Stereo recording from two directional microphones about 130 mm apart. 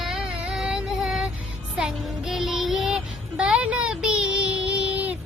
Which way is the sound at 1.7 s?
5° right (ahead or behind).